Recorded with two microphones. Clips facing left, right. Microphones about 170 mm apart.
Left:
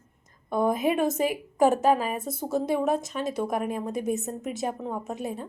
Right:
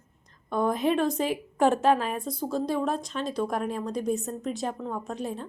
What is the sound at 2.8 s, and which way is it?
A woman's voice, 5° left (ahead or behind).